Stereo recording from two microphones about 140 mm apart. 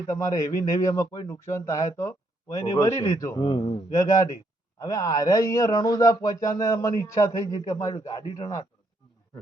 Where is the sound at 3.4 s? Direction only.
40° left (ahead or behind).